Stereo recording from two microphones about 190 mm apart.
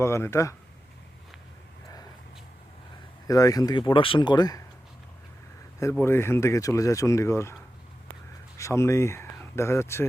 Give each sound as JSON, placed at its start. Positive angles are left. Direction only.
{"t": 0.0, "sound": "speech", "side_deg": 15}
{"t": 3.2, "sound": "speech", "side_deg": 20}
{"t": 5.8, "sound": "speech", "side_deg": 10}
{"t": 8.5, "sound": "speech", "side_deg": 15}